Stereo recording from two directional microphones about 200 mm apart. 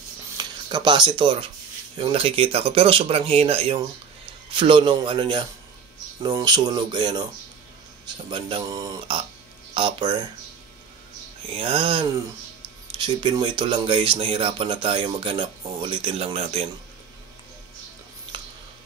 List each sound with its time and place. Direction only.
0.4 s speech: 20° right (ahead or behind)
8.3 s speech: 25° right (ahead or behind)
11.5 s speech: 25° right (ahead or behind)